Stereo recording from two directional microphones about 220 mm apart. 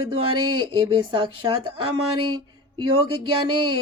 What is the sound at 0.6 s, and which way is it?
Speech, 20° right (ahead or behind).